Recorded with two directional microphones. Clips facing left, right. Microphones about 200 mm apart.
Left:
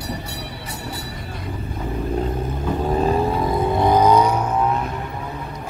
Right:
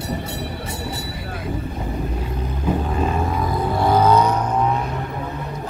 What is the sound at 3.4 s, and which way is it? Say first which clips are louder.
Vehicle: left 2 dB; 20° left (ahead or behind).